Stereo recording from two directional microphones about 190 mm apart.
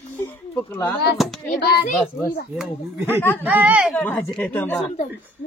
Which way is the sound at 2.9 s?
15° right (ahead or behind).